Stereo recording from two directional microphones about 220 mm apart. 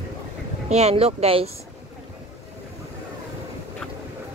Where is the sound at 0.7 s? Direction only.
30° right (ahead or behind).